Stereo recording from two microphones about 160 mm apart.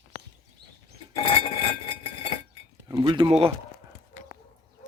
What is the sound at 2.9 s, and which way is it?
Speech, 25° right (ahead or behind).